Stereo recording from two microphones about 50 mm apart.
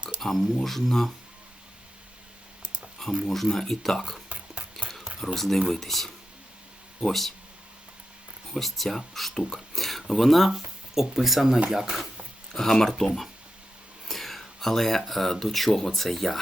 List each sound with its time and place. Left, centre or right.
0.2 s speech: centre
3.2 s speech: centre
4.3 s a sound: right
5.2 s speech: centre
8.5 s speech: centre
12.5 s speech: centre
14.1 s speech: centre